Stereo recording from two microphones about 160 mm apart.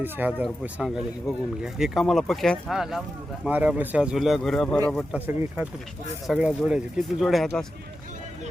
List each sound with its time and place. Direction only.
0.0 s speech: 10° right (ahead or behind)
5.2 s speech: 10° right (ahead or behind)
6.2 s speech: centre (ahead or behind)